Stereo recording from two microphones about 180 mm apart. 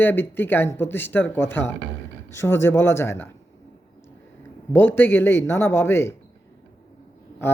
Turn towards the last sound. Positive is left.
turn(degrees=15)  # may be behind; listen again after turning